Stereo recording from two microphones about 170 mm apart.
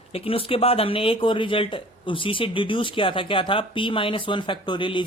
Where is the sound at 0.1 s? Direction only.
35° left (ahead or behind).